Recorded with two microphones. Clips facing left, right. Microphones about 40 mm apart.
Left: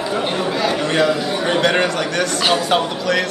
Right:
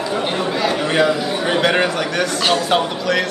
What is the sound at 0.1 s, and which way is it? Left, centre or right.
Chatter, centre.